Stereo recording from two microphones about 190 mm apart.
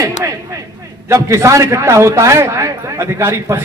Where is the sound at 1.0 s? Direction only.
15° right (ahead or behind).